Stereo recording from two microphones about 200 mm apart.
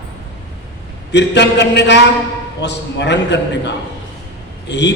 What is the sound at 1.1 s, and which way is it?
A man's voice, 60° left (ahead or behind).